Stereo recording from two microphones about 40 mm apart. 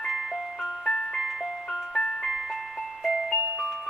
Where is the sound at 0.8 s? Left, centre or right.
Left.